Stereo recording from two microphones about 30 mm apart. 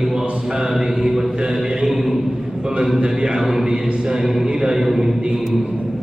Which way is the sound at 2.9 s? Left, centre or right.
Right.